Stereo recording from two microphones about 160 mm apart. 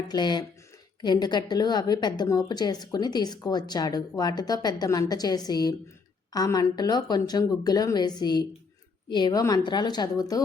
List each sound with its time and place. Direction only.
0.1 s a woman's voice: 25° left (ahead or behind)